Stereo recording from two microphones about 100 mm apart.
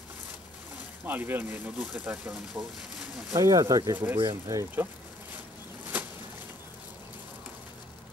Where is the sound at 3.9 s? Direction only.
15° right (ahead or behind).